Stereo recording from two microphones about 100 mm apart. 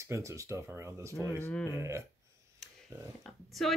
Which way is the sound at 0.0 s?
30° right (ahead or behind).